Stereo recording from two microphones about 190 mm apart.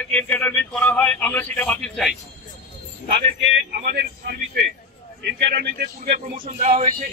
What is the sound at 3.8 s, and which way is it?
Speech, 55° right (ahead or behind).